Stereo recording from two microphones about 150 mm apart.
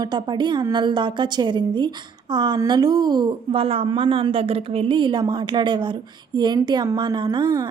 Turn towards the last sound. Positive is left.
turn(degrees=-30)  # may be behind; listen again after turning